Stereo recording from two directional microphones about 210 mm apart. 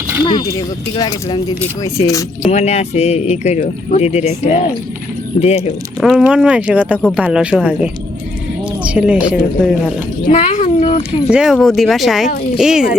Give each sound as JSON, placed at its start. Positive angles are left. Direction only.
{"t": 0.3, "sound": "speech", "side_deg": 20}
{"t": 2.4, "sound": "speech", "side_deg": 30}
{"t": 6.0, "sound": "speech", "side_deg": 0}
{"t": 10.2, "sound": "speech", "side_deg": 35}
{"t": 11.3, "sound": "speech", "side_deg": -5}